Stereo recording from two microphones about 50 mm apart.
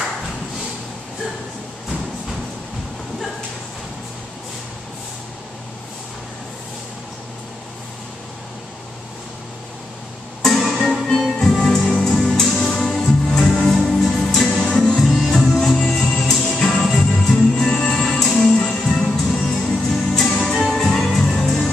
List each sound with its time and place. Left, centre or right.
10.4 s music: centre
13.0 s music: centre